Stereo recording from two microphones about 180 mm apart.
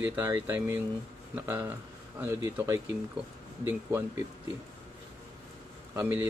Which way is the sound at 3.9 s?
15° right (ahead or behind).